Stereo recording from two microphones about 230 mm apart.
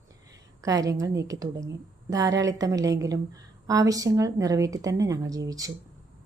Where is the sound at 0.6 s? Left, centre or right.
Centre.